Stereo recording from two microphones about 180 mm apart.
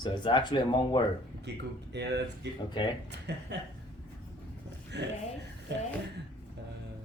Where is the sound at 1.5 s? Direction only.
70° right (ahead or behind).